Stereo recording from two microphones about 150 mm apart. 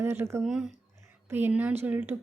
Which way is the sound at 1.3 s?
15° right (ahead or behind).